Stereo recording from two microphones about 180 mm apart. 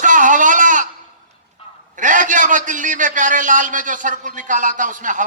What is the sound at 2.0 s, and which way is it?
A man's voice, 45° right (ahead or behind).